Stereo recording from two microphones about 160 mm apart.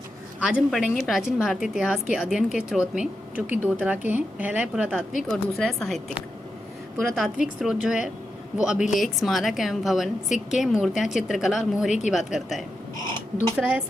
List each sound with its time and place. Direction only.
0.4 s a woman's voice: 5° right (ahead or behind)
11.9 s a woman's voice: 45° left (ahead or behind)
12.1 s a woman's voice: centre (ahead or behind)